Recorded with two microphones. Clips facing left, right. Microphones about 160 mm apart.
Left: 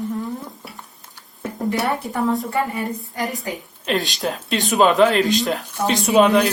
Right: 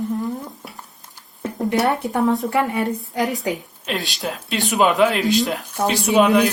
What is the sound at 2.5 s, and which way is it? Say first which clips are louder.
Speech: right 3 dB; 80° right.